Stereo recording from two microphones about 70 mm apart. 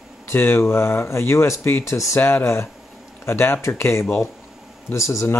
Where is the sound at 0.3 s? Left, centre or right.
Left.